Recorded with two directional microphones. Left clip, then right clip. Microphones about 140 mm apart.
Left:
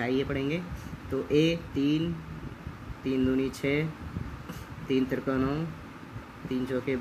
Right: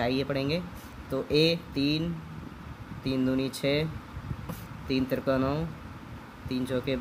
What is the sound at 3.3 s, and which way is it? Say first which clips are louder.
Speech: right 1 dB; 50° right (ahead or behind).